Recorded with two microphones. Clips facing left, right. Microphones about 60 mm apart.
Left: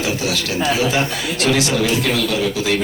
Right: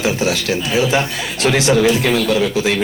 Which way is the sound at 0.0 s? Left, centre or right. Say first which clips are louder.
Right 3 dB; right.